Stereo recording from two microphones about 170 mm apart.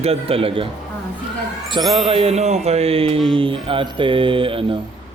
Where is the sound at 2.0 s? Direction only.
35° right (ahead or behind).